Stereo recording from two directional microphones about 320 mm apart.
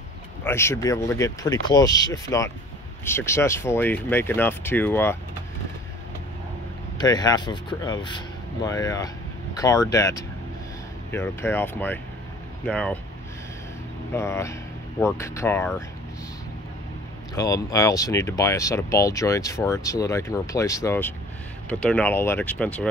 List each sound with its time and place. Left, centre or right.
0.4 s speech: centre
7.0 s speech: centre
14.1 s speech: centre
17.4 s speech: centre